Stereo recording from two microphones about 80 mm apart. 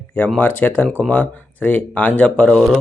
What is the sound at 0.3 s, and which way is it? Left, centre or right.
Speech, centre.